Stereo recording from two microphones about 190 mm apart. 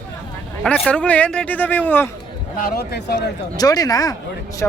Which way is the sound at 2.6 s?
55° left (ahead or behind).